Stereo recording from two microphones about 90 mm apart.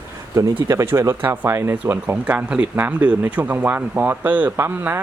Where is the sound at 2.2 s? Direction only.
15° right (ahead or behind).